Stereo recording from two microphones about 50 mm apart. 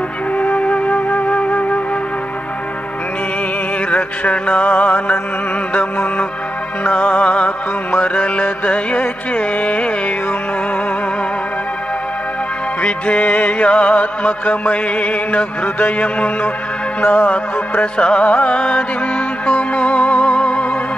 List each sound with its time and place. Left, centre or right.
0.4 s music: left
3.9 s music: left
6.8 s music: left
9.3 s carnatic music: left
12.8 s music: left
17.9 s music: left